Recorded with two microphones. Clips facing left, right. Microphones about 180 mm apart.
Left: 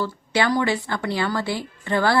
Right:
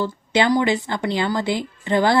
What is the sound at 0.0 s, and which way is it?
A woman's voice, 20° right (ahead or behind).